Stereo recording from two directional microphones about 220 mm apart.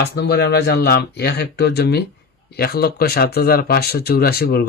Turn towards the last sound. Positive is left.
turn(degrees=45)  # may be behind; listen again after turning